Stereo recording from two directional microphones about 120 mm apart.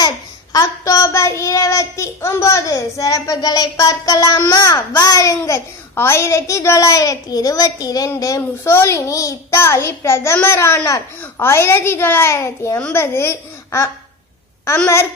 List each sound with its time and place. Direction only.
0.0 s a child's voice: 30° left (ahead or behind)